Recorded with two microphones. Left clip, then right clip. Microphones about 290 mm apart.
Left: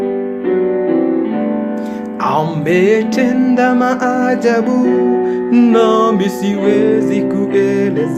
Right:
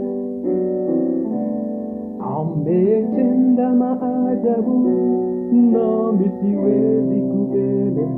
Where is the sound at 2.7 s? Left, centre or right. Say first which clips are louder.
Left 4 dB; left.